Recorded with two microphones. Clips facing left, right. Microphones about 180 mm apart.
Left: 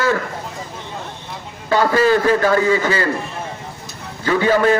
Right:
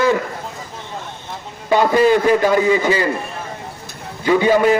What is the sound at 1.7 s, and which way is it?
A man's voice, 15° right (ahead or behind).